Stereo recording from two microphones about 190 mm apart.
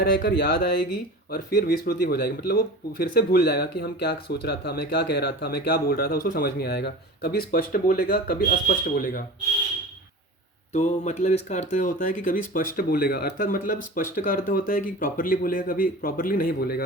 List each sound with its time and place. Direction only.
0.0 s speech: 50° left (ahead or behind)
10.7 s speech: 35° left (ahead or behind); by 16.8 s 55° left (ahead or behind)